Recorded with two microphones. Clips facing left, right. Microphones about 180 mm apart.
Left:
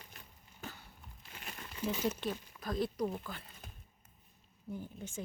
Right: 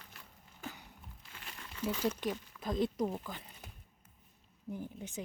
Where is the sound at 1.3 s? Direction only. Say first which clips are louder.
Left 3 dB; 20° left (ahead or behind).